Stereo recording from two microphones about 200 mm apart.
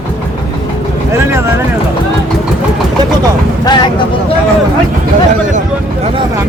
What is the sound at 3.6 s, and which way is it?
Speech, 20° left (ahead or behind).